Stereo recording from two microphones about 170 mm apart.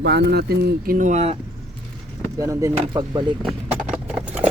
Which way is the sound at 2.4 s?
15° right (ahead or behind).